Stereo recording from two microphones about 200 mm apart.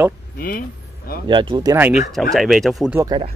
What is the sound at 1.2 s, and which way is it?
Speech, 25° right (ahead or behind).